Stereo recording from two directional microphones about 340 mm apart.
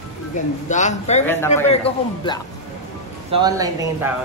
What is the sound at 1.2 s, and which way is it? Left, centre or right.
Speech, centre.